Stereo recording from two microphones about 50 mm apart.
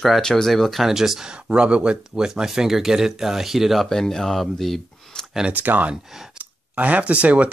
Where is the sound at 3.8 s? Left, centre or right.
Centre.